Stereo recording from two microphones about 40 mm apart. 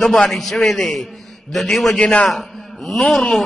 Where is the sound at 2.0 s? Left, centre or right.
Left.